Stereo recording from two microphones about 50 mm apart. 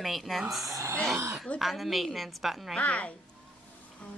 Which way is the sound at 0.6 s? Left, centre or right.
Right.